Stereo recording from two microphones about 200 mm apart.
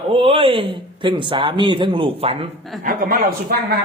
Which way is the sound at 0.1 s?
30° right (ahead or behind).